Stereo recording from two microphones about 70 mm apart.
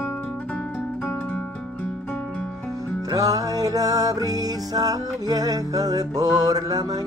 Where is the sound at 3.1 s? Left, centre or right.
Right.